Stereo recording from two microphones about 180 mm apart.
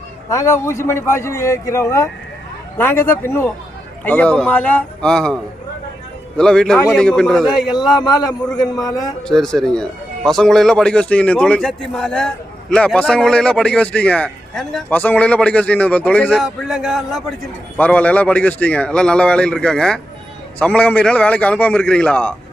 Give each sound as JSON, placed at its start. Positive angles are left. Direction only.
{"t": 0.3, "sound": "a man's voice", "side_deg": 15}
{"t": 7.7, "sound": "a man's voice", "side_deg": 25}
{"t": 9.2, "sound": "a man's voice", "side_deg": 0}
{"t": 17.7, "sound": "a man's voice", "side_deg": 10}